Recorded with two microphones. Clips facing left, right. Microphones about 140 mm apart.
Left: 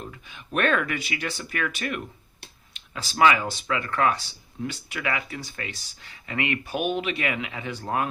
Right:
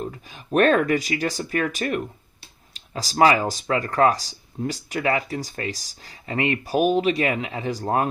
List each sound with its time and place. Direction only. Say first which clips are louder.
0.1 s speech: right 8 dB; 35° right (ahead or behind)